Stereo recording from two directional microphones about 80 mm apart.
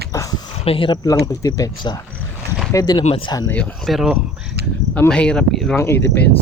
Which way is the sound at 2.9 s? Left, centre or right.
Left.